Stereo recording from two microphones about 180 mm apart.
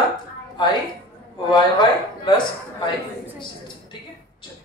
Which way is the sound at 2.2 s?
25° left (ahead or behind).